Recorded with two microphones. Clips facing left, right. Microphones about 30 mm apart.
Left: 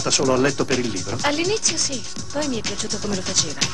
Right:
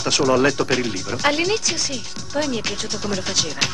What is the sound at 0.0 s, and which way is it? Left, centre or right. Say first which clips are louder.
Speech: right 2 dB; centre.